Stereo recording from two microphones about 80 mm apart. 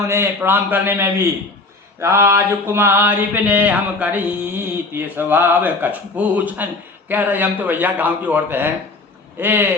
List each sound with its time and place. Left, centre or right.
0.1 s mantra: right